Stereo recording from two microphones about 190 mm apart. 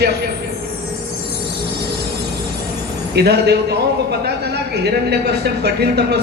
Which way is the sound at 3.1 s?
60° right (ahead or behind).